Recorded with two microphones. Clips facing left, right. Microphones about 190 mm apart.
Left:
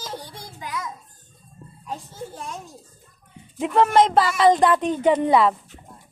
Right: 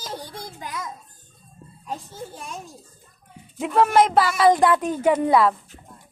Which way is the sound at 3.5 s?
5° right (ahead or behind).